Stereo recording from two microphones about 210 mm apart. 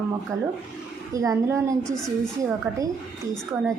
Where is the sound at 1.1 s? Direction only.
15° right (ahead or behind).